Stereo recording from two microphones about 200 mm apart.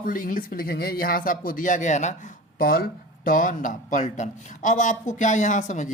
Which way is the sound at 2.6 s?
45° left (ahead or behind).